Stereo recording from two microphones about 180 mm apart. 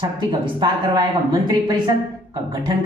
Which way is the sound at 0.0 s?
25° right (ahead or behind).